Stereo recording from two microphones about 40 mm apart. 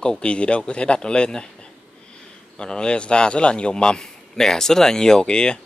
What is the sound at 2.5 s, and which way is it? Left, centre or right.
A man's voice, left.